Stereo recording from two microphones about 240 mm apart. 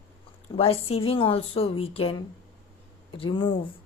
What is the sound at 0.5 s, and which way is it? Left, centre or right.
A woman's voice, left.